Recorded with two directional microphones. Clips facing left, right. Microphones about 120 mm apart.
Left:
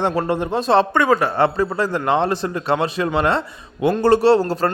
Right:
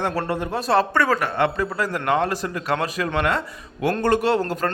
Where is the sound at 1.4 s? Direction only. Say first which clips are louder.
Left 4 dB; 30° left (ahead or behind).